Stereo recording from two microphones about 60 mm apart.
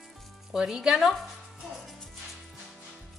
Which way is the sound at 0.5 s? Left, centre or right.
Centre.